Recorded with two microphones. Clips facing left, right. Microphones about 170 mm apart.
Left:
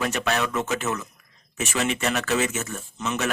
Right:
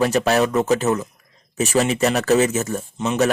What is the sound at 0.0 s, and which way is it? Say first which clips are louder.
Speech: right 8 dB; 35° right (ahead or behind).